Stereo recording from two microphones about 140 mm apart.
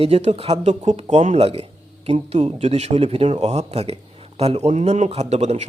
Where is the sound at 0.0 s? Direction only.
50° right (ahead or behind).